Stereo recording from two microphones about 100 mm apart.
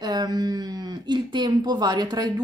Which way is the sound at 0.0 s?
40° right (ahead or behind).